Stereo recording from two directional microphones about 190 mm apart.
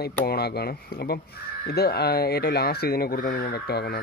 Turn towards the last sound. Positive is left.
turn(degrees=55)  # may be behind; listen again after turning